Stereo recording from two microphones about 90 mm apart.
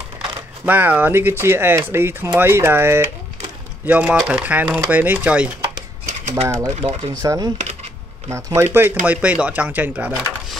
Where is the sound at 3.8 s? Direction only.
15° right (ahead or behind).